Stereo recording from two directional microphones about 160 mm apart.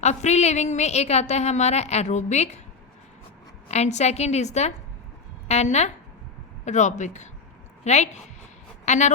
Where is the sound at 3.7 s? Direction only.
45° left (ahead or behind).